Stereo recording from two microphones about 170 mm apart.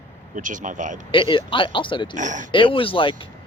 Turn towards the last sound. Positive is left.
turn(degrees=30)  # may be behind; listen again after turning